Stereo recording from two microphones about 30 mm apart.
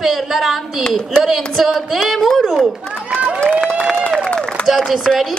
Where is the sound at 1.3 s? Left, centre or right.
Centre.